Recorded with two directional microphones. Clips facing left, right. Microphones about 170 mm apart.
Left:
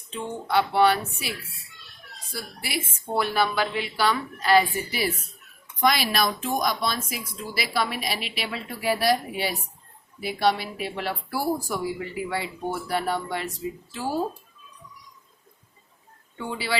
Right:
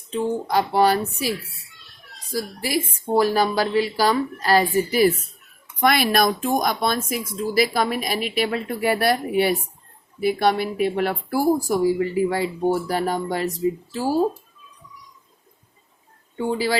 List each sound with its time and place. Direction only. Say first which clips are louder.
0.1 s speech: right 5 dB; 35° right (ahead or behind)
5.8 s speech: right 4 dB; 55° right (ahead or behind); by 14.2 s 40° right (ahead or behind)
16.4 s speech: right 9 dB; 40° right (ahead or behind)